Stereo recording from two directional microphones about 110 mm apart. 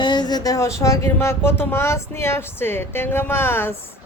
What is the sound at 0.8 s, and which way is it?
Speech, 25° left (ahead or behind).